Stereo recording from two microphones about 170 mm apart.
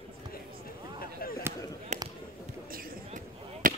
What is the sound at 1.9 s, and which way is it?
Basketball bounce, 45° right (ahead or behind).